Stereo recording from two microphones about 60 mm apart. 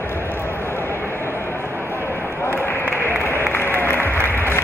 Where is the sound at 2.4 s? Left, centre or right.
Left.